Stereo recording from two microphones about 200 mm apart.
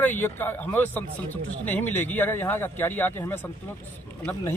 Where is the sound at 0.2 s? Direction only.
10° left (ahead or behind).